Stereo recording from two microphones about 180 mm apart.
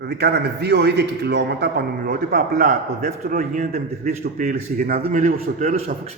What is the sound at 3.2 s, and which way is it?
A man's voice, 55° right (ahead or behind).